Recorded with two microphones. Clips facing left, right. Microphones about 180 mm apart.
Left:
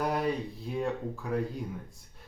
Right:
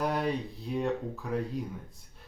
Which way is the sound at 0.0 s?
Centre (ahead or behind).